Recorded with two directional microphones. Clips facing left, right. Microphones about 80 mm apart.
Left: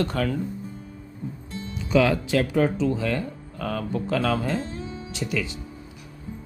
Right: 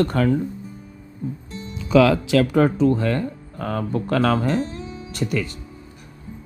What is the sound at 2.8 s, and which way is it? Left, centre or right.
Speech, right.